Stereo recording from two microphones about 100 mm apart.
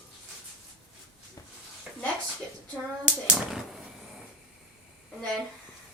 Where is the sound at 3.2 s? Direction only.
5° right (ahead or behind).